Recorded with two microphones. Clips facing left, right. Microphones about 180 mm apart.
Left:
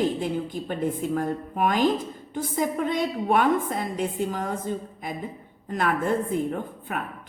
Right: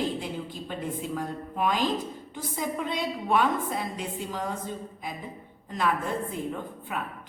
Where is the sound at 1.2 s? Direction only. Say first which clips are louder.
Left 5 dB; 50° left (ahead or behind).